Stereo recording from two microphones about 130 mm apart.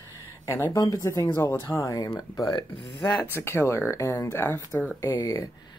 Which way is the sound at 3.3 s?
20° left (ahead or behind).